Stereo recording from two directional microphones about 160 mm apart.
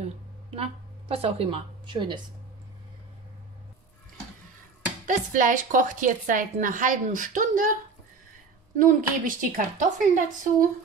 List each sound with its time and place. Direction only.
0.0 s speech: 40° right (ahead or behind)
5.0 s a woman's voice: 55° right (ahead or behind)
8.7 s a woman's voice: 55° right (ahead or behind)